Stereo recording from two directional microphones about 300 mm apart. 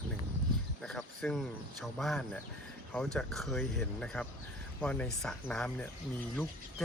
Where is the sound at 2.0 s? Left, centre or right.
Centre.